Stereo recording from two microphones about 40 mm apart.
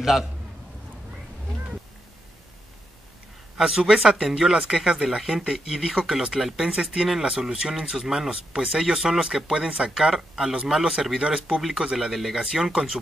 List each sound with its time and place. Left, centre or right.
0.0 s speech: centre
3.5 s speech: centre
9.9 s speech: centre
12.0 s speech: centre
12.4 s speech: centre